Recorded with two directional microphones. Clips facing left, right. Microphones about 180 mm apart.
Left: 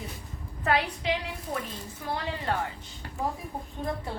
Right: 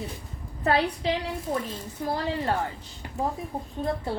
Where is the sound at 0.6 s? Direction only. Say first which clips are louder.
Right 3 dB; 35° right (ahead or behind).